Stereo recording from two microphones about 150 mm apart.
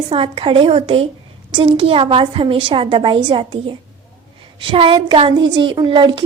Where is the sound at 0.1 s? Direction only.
35° right (ahead or behind).